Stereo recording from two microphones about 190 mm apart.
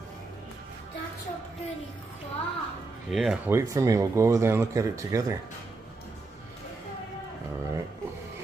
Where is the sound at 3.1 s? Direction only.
Centre (ahead or behind).